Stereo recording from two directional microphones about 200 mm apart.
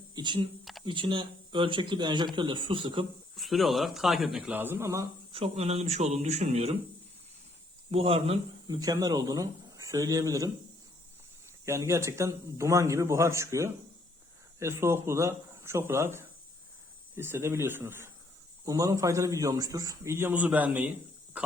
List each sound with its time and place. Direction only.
0.1 s speech: 20° right (ahead or behind)
0.6 s a sound: centre (ahead or behind)
0.9 s speech: 25° right (ahead or behind)
3.3 s speech: centre (ahead or behind)
5.3 s speech: 30° right (ahead or behind)
7.9 s speech: 30° right (ahead or behind)
11.6 s speech: 15° right (ahead or behind)